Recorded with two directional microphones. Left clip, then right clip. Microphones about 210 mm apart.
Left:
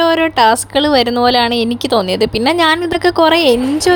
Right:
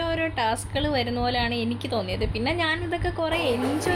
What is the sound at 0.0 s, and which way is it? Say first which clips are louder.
Speech: left 15 dB; 45° left (ahead or behind).